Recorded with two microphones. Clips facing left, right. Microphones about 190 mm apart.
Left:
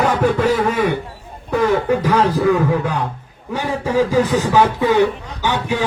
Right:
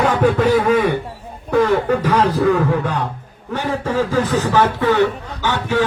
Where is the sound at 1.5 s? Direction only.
10° left (ahead or behind).